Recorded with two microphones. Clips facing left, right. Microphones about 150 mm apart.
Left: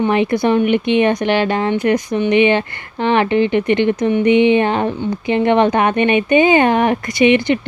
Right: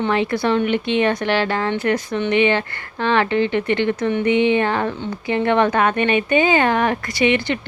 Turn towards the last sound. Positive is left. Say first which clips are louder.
# left 6 dB
turn(degrees=20)  # may be behind; listen again after turning